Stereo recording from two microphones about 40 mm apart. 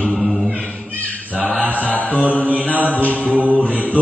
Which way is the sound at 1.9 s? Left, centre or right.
Left.